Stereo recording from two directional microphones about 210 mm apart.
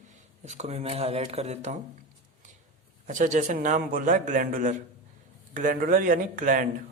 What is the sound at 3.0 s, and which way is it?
Speech, 35° right (ahead or behind).